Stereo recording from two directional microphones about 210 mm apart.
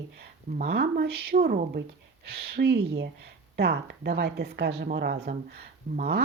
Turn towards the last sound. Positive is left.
turn(degrees=-50)  # may be behind; listen again after turning